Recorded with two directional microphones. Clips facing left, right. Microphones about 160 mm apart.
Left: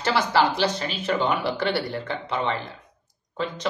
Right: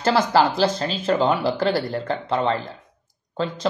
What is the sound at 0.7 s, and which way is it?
Speech, 30° right (ahead or behind).